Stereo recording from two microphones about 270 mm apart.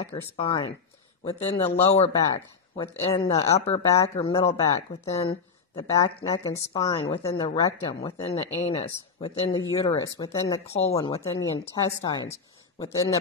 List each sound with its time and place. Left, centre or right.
0.0 s speech: centre